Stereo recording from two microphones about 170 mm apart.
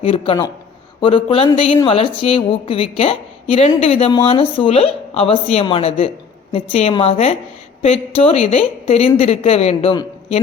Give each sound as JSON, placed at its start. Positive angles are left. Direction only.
{"t": 0.0, "sound": "speech", "side_deg": 35}